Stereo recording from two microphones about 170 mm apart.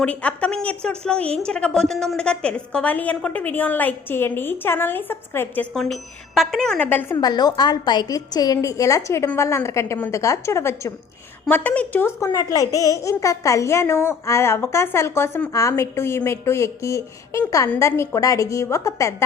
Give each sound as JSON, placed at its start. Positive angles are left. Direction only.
{"t": 0.0, "sound": "a child's voice", "side_deg": 5}
{"t": 5.7, "sound": "speech", "side_deg": 0}
{"t": 7.2, "sound": "a child's voice", "side_deg": 25}